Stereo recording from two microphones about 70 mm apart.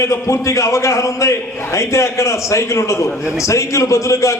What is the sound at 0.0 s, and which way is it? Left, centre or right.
A man's voice, left.